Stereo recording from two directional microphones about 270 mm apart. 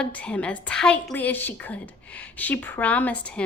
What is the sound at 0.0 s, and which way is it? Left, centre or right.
A woman's voice, centre.